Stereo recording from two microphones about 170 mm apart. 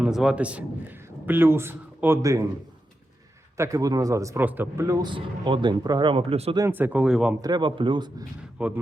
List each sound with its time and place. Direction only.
0.0 s a man's voice: 5° right (ahead or behind)
3.6 s a man's voice: 20° right (ahead or behind)
5.1 s speech: 30° right (ahead or behind)
6.6 s a man's voice: 10° right (ahead or behind)
7.4 s speech: 25° right (ahead or behind)
8.5 s speech: 10° right (ahead or behind)